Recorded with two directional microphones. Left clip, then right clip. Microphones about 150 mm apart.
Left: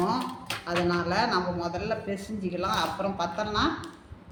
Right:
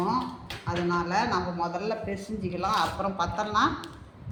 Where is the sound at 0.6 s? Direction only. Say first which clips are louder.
Left 1 dB; 10° left (ahead or behind).